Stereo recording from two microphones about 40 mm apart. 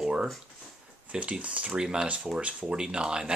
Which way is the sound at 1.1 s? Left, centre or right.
Right.